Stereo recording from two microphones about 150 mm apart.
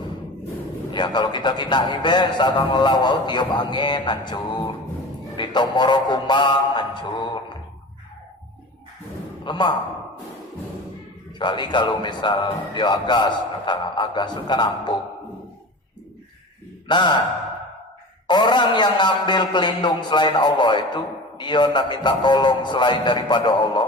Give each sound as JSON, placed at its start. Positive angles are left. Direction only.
{"t": 0.9, "sound": "a man's voice", "side_deg": 30}
{"t": 5.4, "sound": "music", "side_deg": 30}
{"t": 9.4, "sound": "a man's voice", "side_deg": 30}
{"t": 11.3, "sound": "a man's voice", "side_deg": 30}
{"t": 16.9, "sound": "a man's voice", "side_deg": 30}
{"t": 18.3, "sound": "a man's voice", "side_deg": 30}